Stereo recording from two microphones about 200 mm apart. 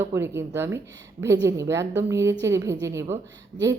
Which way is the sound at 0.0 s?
10° right (ahead or behind).